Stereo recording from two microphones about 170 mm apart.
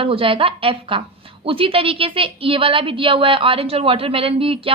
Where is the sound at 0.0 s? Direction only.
35° right (ahead or behind).